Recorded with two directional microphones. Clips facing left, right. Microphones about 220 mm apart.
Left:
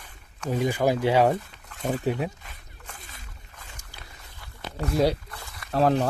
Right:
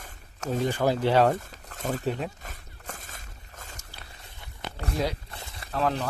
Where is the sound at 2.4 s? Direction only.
45° right (ahead or behind).